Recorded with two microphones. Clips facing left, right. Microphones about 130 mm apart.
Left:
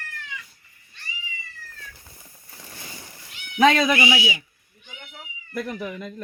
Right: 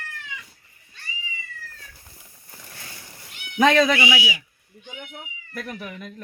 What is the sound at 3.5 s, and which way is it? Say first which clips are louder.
Speech: even; centre (ahead or behind).